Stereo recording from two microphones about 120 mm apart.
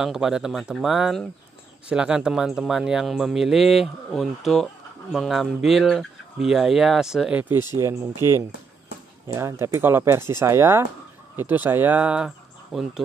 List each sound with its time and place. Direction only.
0.0 s speech: 5° right (ahead or behind)
7.7 s speech: 25° right (ahead or behind); by 12.9 s 5° right (ahead or behind)